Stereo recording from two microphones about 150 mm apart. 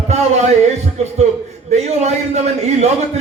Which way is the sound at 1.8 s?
50° right (ahead or behind).